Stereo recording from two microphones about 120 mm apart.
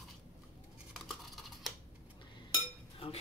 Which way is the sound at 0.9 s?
Centre (ahead or behind).